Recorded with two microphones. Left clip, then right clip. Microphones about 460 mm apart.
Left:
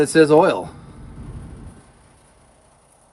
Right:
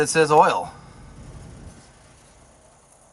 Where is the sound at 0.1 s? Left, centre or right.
Centre.